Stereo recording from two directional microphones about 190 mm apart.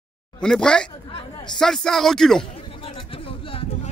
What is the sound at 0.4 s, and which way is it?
A man's voice, 5° left (ahead or behind).